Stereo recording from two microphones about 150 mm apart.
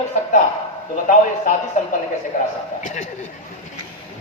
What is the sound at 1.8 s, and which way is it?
Speech, 55° left (ahead or behind).